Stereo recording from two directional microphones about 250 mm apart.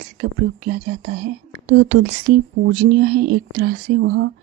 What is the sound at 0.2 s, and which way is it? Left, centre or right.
Speech, right.